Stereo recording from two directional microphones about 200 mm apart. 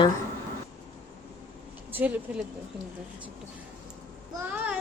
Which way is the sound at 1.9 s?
10° right (ahead or behind).